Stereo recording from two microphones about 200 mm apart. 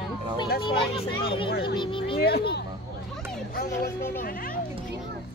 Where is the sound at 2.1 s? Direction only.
50° left (ahead or behind).